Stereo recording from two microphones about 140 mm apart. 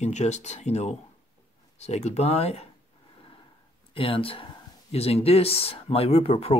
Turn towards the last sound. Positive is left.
turn(degrees=40)  # may be behind; listen again after turning